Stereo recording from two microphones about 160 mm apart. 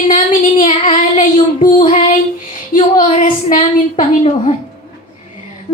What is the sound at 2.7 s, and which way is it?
A woman's voice, 50° left (ahead or behind).